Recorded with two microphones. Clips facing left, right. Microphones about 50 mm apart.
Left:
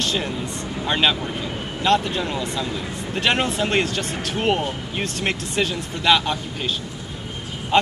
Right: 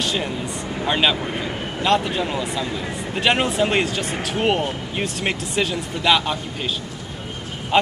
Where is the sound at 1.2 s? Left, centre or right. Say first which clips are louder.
Right 2 dB; right.